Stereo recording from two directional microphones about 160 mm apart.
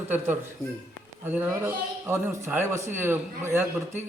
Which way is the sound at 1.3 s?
10° right (ahead or behind).